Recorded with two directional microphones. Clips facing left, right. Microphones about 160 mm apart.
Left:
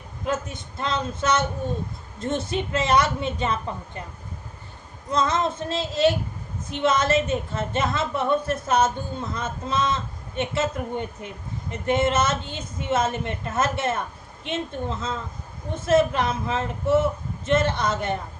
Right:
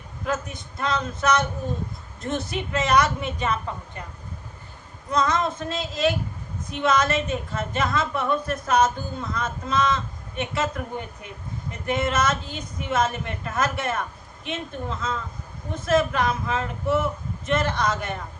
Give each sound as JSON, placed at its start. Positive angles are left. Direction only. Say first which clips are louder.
{"t": 0.3, "sound": "speech", "louder": "left 1 dB", "side_deg": 25}
{"t": 5.1, "sound": "speech", "louder": "even", "side_deg": 25}